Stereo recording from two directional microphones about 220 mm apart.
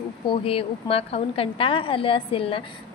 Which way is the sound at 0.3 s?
25° left (ahead or behind).